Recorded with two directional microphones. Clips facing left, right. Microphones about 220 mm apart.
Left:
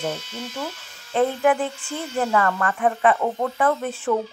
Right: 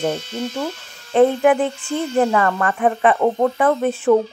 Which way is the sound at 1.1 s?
60° right (ahead or behind).